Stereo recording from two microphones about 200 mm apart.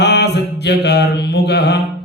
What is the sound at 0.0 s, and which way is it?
Mantra, 55° left (ahead or behind).